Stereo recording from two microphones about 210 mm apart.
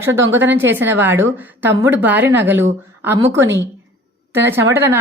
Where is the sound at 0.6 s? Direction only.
10° right (ahead or behind).